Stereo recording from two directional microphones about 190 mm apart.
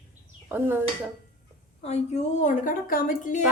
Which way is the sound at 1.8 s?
35° left (ahead or behind).